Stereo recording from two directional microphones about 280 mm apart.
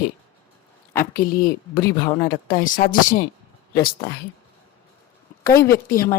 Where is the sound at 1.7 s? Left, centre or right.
Centre.